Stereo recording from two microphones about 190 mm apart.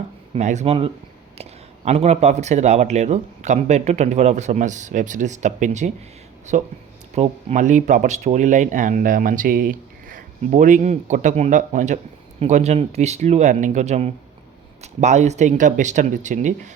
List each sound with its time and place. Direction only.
0.3 s speech: 35° right (ahead or behind)